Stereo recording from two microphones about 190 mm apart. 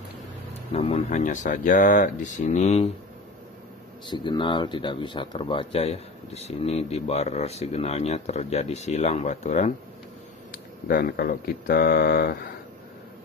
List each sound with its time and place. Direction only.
0.7 s speech: 35° left (ahead or behind)
4.1 s speech: 25° left (ahead or behind)
10.5 s speech: 50° left (ahead or behind)